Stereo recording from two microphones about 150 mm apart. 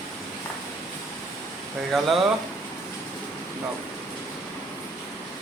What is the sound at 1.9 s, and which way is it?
Speech, centre (ahead or behind).